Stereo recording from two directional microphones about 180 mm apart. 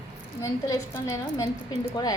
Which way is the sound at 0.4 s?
15° left (ahead or behind).